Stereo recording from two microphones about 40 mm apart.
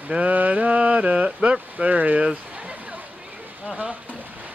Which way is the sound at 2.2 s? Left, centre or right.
Right.